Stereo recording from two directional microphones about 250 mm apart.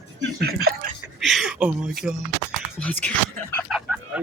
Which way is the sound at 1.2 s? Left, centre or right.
Centre.